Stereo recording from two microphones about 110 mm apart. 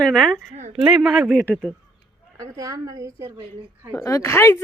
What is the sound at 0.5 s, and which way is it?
Speech, 90° right.